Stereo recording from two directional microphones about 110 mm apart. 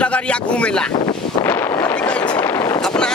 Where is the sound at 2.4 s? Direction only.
30° left (ahead or behind).